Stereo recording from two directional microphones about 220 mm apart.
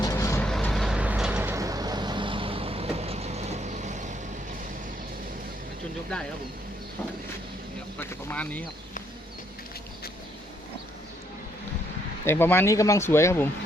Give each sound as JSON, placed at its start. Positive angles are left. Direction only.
{"t": 0.0, "sound": "vehicle", "side_deg": 15}
{"t": 7.9, "sound": "speech", "side_deg": 5}
{"t": 12.2, "sound": "speech", "side_deg": 10}